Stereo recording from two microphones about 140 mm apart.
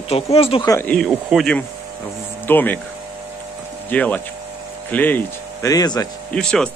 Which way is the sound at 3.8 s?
10° left (ahead or behind).